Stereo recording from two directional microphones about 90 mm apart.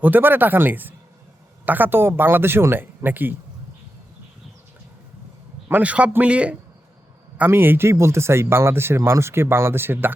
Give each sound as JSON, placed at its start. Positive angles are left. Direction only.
{"t": 0.0, "sound": "speech", "side_deg": -20}
{"t": 5.6, "sound": "a man's voice", "side_deg": -15}